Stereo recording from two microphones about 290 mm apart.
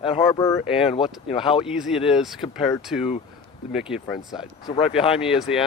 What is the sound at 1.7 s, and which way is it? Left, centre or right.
Speech, centre.